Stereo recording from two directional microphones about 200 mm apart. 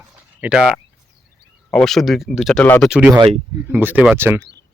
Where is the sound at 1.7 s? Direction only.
Centre (ahead or behind).